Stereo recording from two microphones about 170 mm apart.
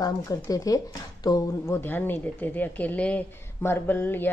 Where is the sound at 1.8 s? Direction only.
10° left (ahead or behind).